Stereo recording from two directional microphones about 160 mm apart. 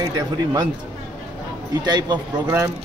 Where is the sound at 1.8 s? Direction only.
25° right (ahead or behind).